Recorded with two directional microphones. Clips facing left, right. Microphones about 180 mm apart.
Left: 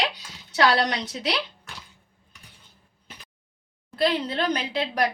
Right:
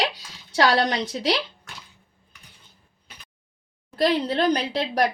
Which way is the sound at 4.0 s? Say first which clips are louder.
Right 3 dB; 40° right (ahead or behind).